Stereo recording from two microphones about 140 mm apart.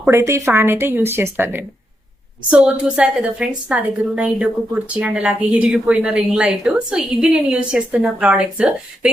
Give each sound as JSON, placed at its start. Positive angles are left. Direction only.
{"t": 0.0, "sound": "a woman's voice", "side_deg": -20}